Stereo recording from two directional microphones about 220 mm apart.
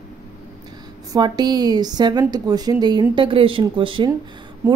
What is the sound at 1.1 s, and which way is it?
A woman's voice, 20° right (ahead or behind).